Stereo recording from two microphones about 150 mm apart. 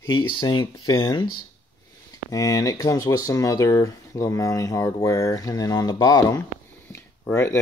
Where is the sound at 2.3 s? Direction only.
25° left (ahead or behind).